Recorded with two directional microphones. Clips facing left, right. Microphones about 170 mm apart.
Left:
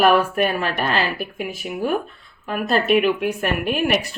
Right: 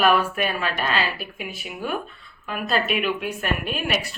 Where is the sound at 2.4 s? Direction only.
45° left (ahead or behind).